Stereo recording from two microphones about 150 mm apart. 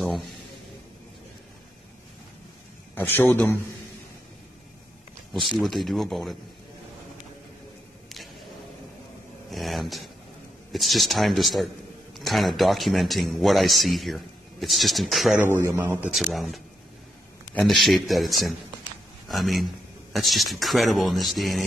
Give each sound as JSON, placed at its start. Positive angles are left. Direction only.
{"t": 2.9, "sound": "a man's voice", "side_deg": 15}
{"t": 5.6, "sound": "speech", "side_deg": 0}
{"t": 9.5, "sound": "speech", "side_deg": 0}
{"t": 15.5, "sound": "a man's voice", "side_deg": -15}
{"t": 16.2, "sound": "a man's voice", "side_deg": 0}